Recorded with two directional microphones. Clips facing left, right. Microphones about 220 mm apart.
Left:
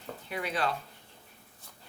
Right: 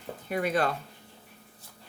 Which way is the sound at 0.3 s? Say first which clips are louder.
Right 6 dB; 50° right (ahead or behind).